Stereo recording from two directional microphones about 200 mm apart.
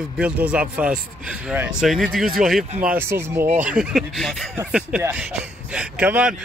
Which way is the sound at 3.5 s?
40° right (ahead or behind).